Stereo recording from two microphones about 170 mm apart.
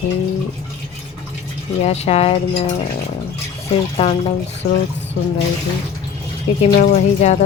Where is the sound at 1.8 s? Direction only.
40° left (ahead or behind).